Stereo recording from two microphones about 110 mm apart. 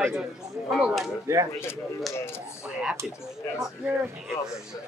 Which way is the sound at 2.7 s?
5° right (ahead or behind).